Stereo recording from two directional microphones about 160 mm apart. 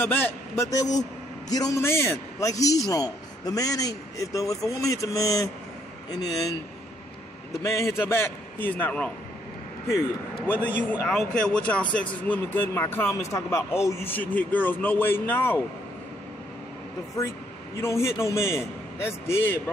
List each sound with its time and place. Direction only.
0.0 s a man's voice: 15° left (ahead or behind)
7.6 s speech: 20° left (ahead or behind)
10.9 s speech: 5° left (ahead or behind)
17.7 s speech: 15° left (ahead or behind)